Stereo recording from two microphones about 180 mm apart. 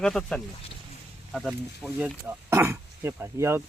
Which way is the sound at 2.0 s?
10° right (ahead or behind).